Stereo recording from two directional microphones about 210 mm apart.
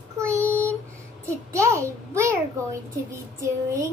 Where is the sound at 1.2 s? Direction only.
15° right (ahead or behind).